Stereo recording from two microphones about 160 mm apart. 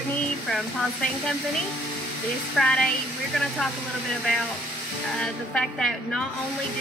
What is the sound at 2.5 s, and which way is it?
Speech, 5° left (ahead or behind).